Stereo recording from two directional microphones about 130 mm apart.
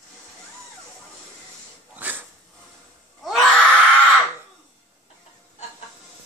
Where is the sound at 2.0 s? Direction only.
15° right (ahead or behind).